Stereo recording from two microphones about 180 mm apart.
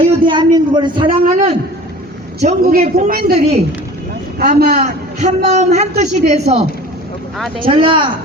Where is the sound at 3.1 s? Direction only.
50° right (ahead or behind).